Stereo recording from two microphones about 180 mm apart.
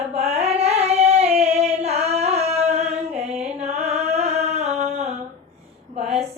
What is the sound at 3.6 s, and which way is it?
Music, 35° right (ahead or behind).